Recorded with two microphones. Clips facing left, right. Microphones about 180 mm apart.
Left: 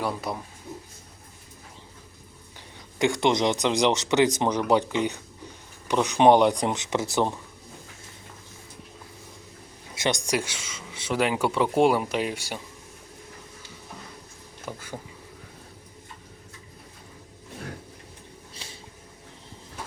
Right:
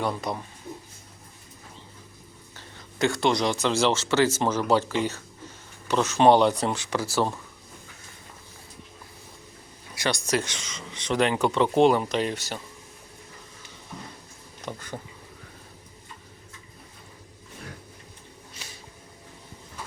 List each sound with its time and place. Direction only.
0.0 s speech: 5° left (ahead or behind)
2.6 s speech: 15° left (ahead or behind)
9.9 s speech: 20° left (ahead or behind)
14.6 s speech: 5° left (ahead or behind)
18.5 s a sound: 30° left (ahead or behind)